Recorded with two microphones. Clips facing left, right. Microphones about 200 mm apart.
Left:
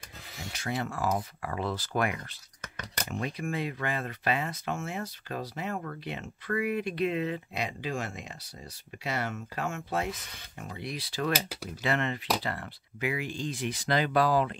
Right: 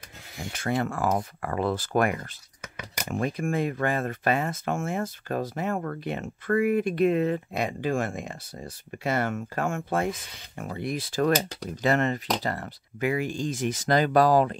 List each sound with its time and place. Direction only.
0.5 s speech: 55° right (ahead or behind)
2.6 s a sound: 10° right (ahead or behind)
3.1 s speech: 50° right (ahead or behind)